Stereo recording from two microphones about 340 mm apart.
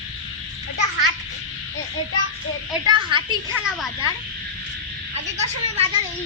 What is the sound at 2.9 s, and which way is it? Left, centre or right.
Speech, centre.